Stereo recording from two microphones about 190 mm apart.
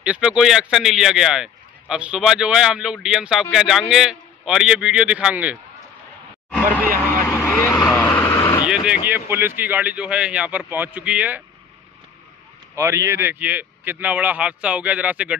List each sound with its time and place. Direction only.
0.0 s speech: 5° right (ahead or behind)
7.2 s vehicle: 15° left (ahead or behind)
8.6 s a sound: 5° right (ahead or behind)
9.6 s speech: 10° right (ahead or behind)
12.7 s speech: 15° right (ahead or behind)